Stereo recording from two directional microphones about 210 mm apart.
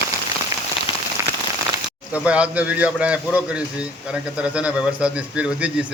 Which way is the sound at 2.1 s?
5° right (ahead or behind).